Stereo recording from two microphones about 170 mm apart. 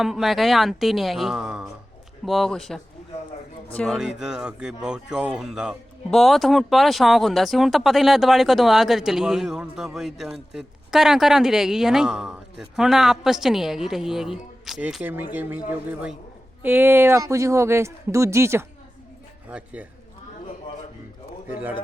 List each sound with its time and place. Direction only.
0.0 s speech: centre (ahead or behind)
3.9 s speech: 5° right (ahead or behind)
21.5 s speech: 10° right (ahead or behind)